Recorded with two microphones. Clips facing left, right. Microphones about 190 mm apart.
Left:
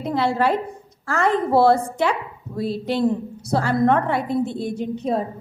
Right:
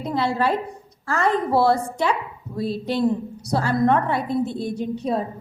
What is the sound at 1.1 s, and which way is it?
Speech, 50° left (ahead or behind).